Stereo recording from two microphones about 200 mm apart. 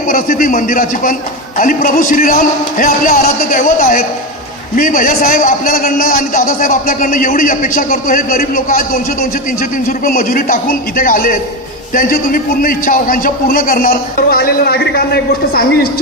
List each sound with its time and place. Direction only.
0.1 s a man's voice: 40° left (ahead or behind)